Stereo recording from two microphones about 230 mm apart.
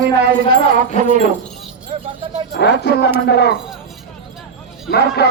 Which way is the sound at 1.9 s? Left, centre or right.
Right.